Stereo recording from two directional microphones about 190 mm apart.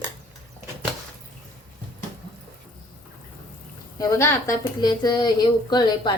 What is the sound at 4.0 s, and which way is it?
Speech, 15° left (ahead or behind).